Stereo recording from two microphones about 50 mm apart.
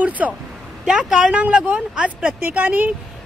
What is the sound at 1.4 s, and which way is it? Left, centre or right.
Speech, right.